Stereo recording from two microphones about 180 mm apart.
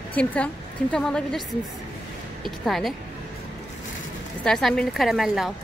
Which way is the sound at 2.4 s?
Centre (ahead or behind).